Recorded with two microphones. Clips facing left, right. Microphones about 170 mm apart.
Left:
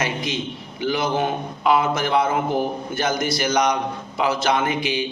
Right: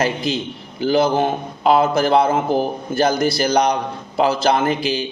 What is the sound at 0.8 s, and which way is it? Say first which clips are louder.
A man's voice: right 6 dB; 35° right (ahead or behind).